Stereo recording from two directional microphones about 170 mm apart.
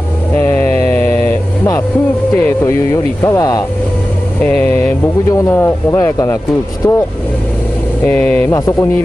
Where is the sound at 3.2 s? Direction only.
20° left (ahead or behind).